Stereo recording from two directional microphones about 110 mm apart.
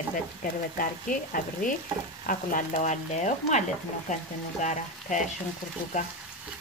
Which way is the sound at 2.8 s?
90° left.